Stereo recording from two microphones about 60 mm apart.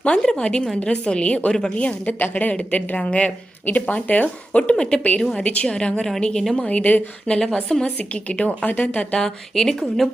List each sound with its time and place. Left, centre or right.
0.0 s a woman's voice: centre
4.7 s a woman's voice: centre
6.6 s a woman's voice: left
7.3 s a woman's voice: centre
7.9 s a woman's voice: left
9.1 s speech: centre